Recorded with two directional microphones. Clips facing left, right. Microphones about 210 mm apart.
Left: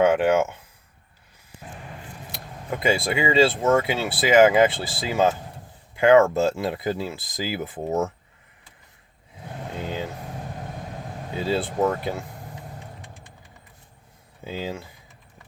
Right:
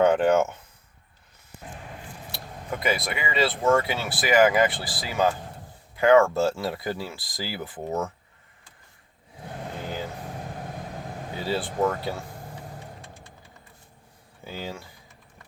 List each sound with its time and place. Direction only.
0.0 s speech: 10° left (ahead or behind)
2.3 s speech: 20° left (ahead or behind)
9.8 s vehicle: 20° left (ahead or behind)
11.3 s speech: 20° left (ahead or behind)
14.4 s speech: 20° left (ahead or behind)